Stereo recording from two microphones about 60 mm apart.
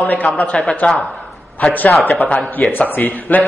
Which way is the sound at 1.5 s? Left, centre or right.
Left.